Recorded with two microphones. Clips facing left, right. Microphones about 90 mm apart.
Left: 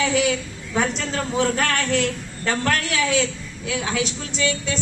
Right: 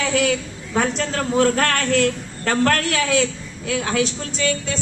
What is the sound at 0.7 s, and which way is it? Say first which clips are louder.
A woman's voice: right 2 dB; 50° right (ahead or behind).